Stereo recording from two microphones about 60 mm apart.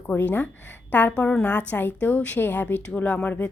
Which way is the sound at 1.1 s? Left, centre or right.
Centre.